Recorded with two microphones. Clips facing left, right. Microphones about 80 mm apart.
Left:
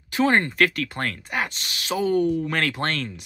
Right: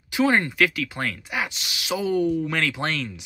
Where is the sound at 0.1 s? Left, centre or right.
Centre.